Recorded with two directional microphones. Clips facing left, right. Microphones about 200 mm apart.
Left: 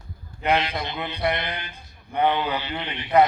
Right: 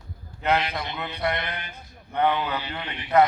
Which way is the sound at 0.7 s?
25° left (ahead or behind).